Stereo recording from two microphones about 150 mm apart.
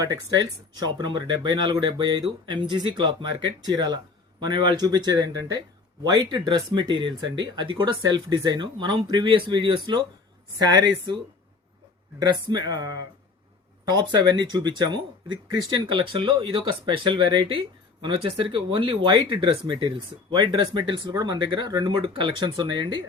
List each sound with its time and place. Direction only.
0.0 s speech: 25° right (ahead or behind)
12.2 s speech: 25° right (ahead or behind)